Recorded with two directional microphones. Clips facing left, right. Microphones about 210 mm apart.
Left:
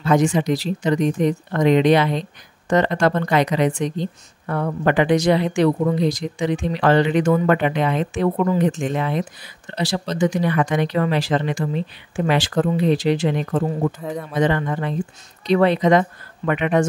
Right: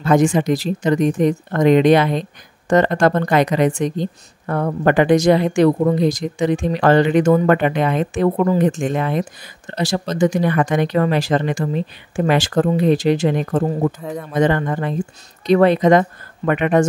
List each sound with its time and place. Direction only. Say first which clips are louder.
0.0 s a woman's voice: right 3 dB; 50° right (ahead or behind)
13.9 s speech: even; centre (ahead or behind)
14.3 s a woman's voice: right 3 dB; 45° right (ahead or behind)